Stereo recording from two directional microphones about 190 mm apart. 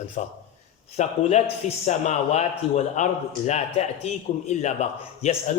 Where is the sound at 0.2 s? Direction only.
40° left (ahead or behind).